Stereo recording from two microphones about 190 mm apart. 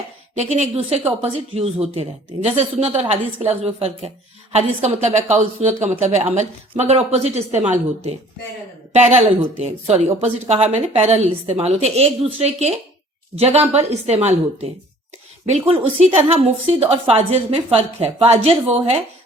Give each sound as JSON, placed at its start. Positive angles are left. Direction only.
{"t": 0.3, "sound": "a woman's voice", "side_deg": -35}